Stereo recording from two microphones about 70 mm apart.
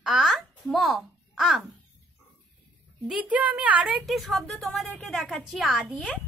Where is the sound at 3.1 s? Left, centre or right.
Centre.